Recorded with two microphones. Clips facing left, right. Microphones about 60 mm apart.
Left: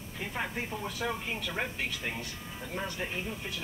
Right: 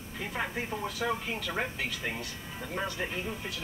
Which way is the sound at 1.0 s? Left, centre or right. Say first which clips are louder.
Right 2 dB; centre.